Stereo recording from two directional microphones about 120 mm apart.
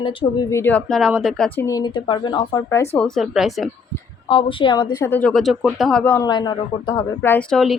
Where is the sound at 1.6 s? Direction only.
30° left (ahead or behind).